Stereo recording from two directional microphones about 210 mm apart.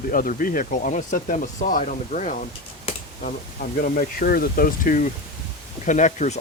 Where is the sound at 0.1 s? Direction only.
40° left (ahead or behind).